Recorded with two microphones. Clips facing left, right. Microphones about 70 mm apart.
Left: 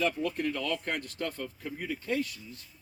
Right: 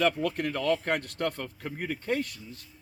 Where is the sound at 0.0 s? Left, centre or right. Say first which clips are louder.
Right 3 dB; right.